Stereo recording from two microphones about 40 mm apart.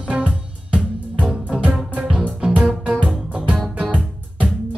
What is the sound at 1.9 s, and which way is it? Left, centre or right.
Music, right.